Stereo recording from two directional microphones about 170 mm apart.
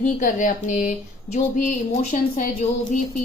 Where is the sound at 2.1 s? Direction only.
50° left (ahead or behind).